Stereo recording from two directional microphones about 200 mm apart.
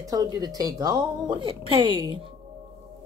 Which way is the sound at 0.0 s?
15° right (ahead or behind).